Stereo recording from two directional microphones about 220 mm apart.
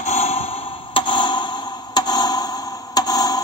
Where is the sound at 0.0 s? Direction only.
30° left (ahead or behind).